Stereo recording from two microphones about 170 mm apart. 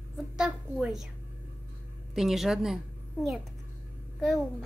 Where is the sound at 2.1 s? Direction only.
Centre (ahead or behind).